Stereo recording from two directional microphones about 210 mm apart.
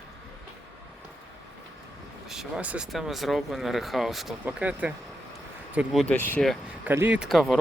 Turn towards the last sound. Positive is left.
turn(degrees=0)  # may be behind; listen again after turning